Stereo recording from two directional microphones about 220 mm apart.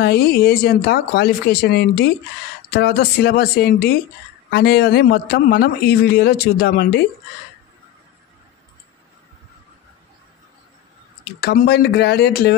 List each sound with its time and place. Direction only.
0.0 s a man's voice: 45° left (ahead or behind)
11.4 s a man's voice: 50° left (ahead or behind)